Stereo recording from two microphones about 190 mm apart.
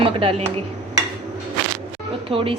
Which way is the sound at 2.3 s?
30° right (ahead or behind).